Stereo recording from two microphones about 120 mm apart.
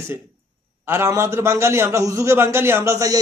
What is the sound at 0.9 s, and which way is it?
A man's voice, 20° right (ahead or behind).